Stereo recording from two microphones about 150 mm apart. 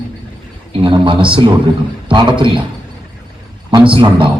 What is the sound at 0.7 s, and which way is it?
A man's voice, 35° right (ahead or behind).